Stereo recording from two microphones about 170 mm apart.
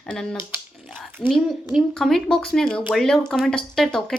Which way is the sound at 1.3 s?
Centre (ahead or behind).